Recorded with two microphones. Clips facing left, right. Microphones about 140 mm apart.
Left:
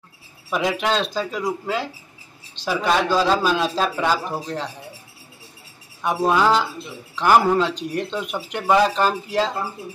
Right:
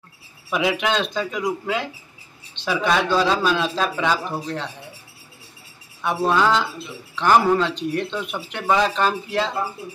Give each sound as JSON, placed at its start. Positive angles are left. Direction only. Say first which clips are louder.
{"t": 0.5, "sound": "a man's voice", "louder": "even", "side_deg": 0}
{"t": 2.6, "sound": "a sound", "louder": "even", "side_deg": 40}
{"t": 2.9, "sound": "speech", "louder": "left 1 dB", "side_deg": 5}
{"t": 6.0, "sound": "a man's voice", "louder": "left 1 dB", "side_deg": 10}